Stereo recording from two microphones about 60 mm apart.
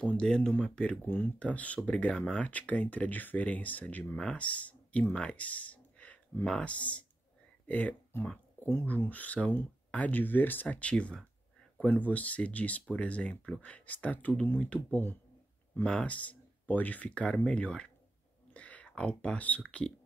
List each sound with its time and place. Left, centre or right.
0.2 s speech: centre
1.0 s speech: left
5.1 s a sound: left
6.4 s speech: centre
8.1 s speech: left
8.5 s a sound: left
9.1 s speech: left
15.8 s speech: centre